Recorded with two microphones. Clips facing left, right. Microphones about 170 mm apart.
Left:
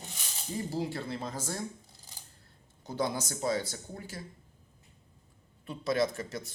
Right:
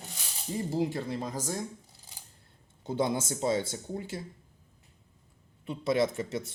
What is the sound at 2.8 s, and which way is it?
Speech, 25° right (ahead or behind).